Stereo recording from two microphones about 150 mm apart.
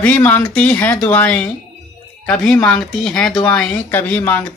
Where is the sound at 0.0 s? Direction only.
10° left (ahead or behind).